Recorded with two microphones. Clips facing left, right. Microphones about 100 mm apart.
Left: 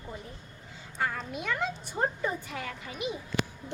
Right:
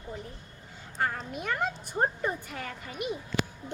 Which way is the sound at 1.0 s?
45° right (ahead or behind).